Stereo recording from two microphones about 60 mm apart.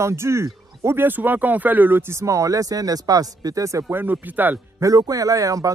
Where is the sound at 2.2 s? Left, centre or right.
Right.